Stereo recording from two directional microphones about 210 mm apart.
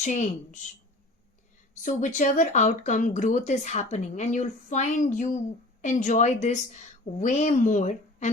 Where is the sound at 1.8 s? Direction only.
35° left (ahead or behind).